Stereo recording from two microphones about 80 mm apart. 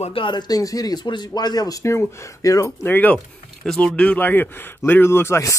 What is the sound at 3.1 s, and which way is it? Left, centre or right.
Speech, centre.